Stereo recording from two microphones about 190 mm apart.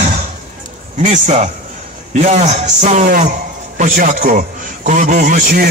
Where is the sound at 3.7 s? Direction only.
45° right (ahead or behind).